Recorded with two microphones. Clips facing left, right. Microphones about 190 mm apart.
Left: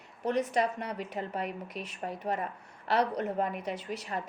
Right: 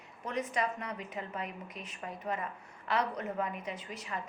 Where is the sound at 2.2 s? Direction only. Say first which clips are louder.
Left 2 dB; 35° left (ahead or behind).